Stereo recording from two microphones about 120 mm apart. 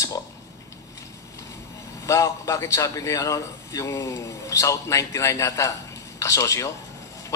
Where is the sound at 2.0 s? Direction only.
25° left (ahead or behind).